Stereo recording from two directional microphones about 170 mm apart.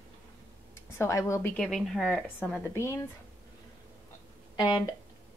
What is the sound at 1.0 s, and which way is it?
Speech, 15° left (ahead or behind).